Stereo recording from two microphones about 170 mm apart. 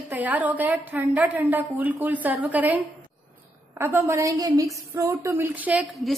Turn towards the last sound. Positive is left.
turn(degrees=-10)  # may be behind; listen again after turning